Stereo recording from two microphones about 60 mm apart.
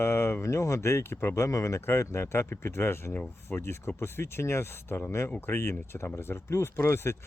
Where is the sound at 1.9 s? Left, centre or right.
Left.